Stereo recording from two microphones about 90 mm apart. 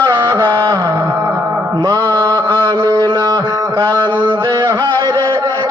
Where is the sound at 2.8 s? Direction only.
45° right (ahead or behind).